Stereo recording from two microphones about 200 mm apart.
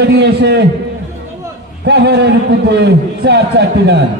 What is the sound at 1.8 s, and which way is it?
A man's voice, 55° right (ahead or behind).